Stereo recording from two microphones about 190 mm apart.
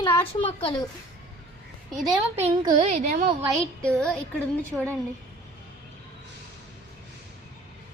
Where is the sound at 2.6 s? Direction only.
25° right (ahead or behind).